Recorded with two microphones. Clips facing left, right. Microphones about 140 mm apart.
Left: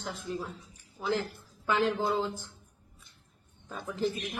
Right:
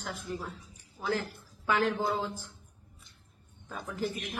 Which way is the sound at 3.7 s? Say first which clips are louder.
Left 3 dB; 20° left (ahead or behind).